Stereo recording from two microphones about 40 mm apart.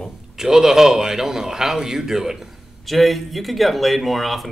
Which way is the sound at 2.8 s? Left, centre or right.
Centre.